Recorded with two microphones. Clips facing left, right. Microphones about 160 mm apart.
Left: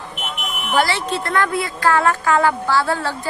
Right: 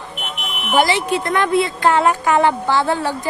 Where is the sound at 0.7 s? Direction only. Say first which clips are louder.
Right 3 dB; 15° right (ahead or behind).